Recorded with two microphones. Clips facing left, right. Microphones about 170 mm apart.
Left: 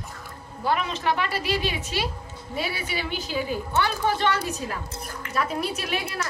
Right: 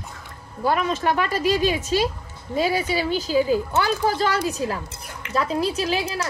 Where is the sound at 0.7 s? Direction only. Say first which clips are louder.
Right 3 dB; 45° right (ahead or behind).